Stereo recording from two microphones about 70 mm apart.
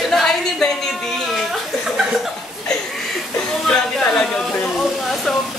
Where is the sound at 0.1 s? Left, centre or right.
Centre.